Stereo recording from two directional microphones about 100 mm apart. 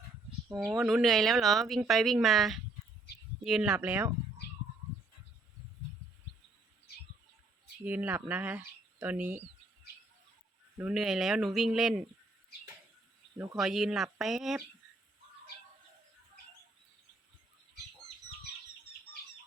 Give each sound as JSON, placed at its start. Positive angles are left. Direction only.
{"t": 0.8, "sound": "speech", "side_deg": -5}
{"t": 3.8, "sound": "speech", "side_deg": -20}
{"t": 7.9, "sound": "speech", "side_deg": -20}
{"t": 10.8, "sound": "speech", "side_deg": -5}
{"t": 13.6, "sound": "speech", "side_deg": -5}